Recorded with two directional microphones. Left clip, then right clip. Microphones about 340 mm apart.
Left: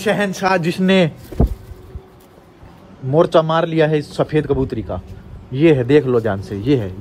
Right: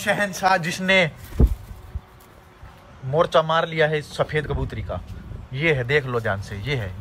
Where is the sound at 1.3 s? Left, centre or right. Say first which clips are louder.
Left 5 dB; centre.